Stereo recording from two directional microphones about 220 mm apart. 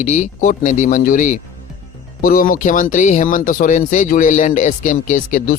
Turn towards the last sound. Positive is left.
turn(degrees=35)  # may be behind; listen again after turning